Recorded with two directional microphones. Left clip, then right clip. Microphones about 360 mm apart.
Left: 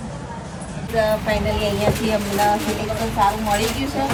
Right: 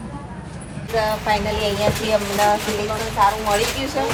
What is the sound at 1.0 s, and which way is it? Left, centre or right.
Speech, centre.